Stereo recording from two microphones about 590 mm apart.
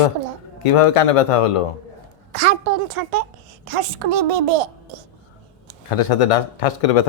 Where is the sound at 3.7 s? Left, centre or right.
Right.